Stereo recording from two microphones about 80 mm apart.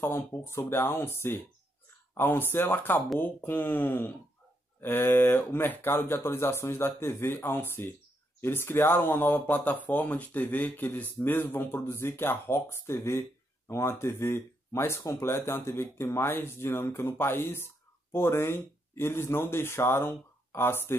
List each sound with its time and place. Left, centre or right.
0.0 s speech: left